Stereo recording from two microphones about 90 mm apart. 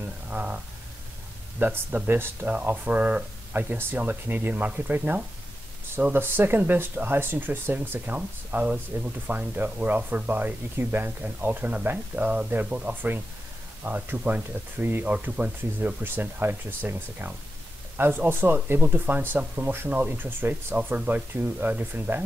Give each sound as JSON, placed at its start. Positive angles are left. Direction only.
{"t": 0.3, "sound": "speech", "side_deg": -15}
{"t": 1.6, "sound": "speech", "side_deg": -20}